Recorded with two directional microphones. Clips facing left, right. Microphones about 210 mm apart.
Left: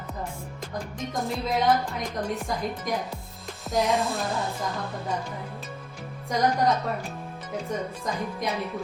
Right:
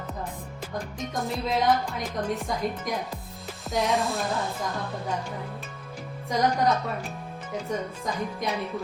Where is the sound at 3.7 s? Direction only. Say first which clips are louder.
Left 1 dB; centre (ahead or behind).